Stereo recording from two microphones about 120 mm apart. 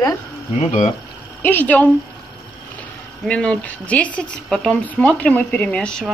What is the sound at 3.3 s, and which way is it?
Speech, 10° left (ahead or behind).